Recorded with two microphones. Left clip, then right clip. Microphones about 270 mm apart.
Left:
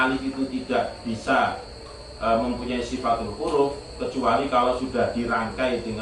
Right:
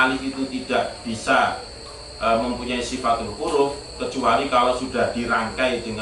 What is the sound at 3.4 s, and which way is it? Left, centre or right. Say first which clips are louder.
Mantra: right 2 dB; left.